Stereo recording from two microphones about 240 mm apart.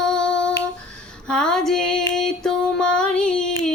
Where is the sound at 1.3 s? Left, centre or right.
Centre.